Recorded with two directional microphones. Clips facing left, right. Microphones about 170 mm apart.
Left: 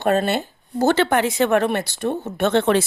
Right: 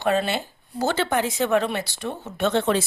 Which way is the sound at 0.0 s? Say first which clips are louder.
Left 3 dB; 50° left (ahead or behind).